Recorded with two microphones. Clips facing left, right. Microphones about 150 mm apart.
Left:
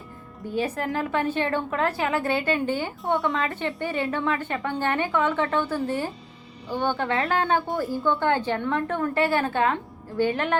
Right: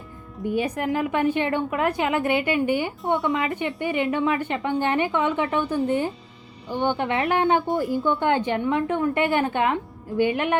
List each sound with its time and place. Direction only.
0.5 s a woman's voice: 15° right (ahead or behind)